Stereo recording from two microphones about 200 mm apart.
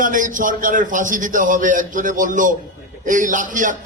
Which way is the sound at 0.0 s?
40° right (ahead or behind).